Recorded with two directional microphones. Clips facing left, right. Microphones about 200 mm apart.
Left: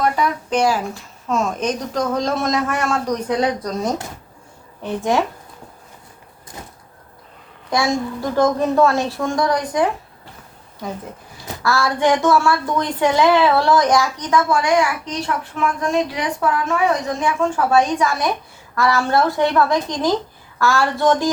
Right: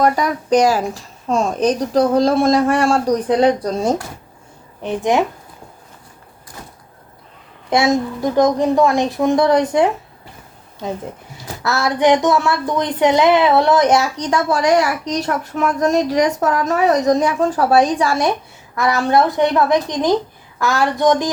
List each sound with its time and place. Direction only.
0.0 s a woman's voice: 40° right (ahead or behind)
4.8 s a woman's voice: 20° right (ahead or behind)
7.7 s a woman's voice: 20° right (ahead or behind)
11.6 s a woman's voice: 20° right (ahead or behind)
14.3 s a woman's voice: 35° right (ahead or behind); by 21.2 s 15° right (ahead or behind)